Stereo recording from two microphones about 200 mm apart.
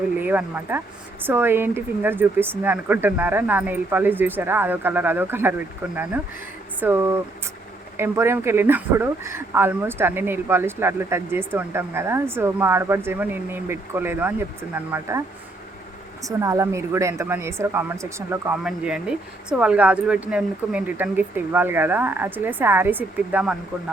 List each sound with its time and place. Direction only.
0.2 s speech: 10° right (ahead or behind)
16.2 s speech: 15° right (ahead or behind)